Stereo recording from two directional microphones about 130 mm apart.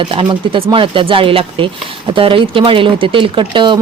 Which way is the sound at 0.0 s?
40° right (ahead or behind).